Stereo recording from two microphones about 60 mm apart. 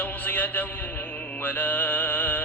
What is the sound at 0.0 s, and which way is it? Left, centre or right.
Music, left.